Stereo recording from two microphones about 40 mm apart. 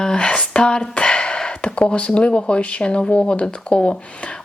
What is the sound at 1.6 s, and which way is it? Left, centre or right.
Speech, left.